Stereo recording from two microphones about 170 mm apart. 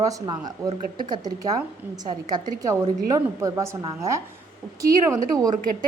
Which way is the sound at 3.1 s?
20° right (ahead or behind).